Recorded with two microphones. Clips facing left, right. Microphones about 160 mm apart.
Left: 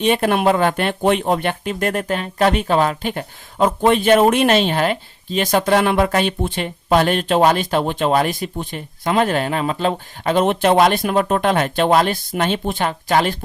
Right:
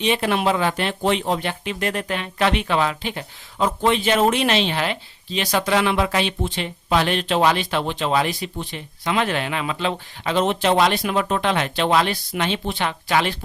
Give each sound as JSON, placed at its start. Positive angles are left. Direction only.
{"t": 0.0, "sound": "speech", "side_deg": 50}